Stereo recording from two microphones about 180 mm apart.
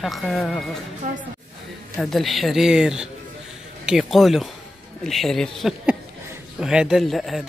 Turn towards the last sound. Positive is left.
turn(degrees=0)  # may be behind; listen again after turning